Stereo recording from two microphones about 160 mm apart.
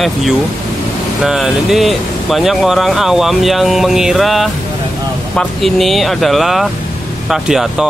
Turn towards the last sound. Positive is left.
turn(degrees=-5)  # may be behind; listen again after turning